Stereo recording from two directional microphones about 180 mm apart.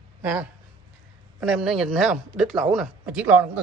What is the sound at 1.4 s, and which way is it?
Speech, centre (ahead or behind).